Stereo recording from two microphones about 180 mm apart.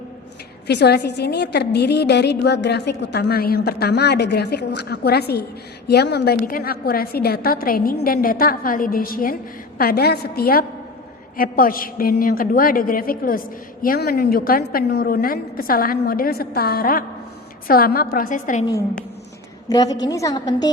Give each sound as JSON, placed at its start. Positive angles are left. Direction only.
{"t": 0.7, "sound": "a woman's voice", "side_deg": 70}
{"t": 19.6, "sound": "a woman's voice", "side_deg": 20}